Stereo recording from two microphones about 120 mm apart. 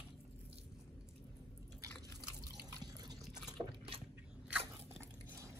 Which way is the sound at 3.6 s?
50° right (ahead or behind).